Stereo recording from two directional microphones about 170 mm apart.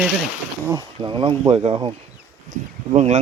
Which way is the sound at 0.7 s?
25° right (ahead or behind).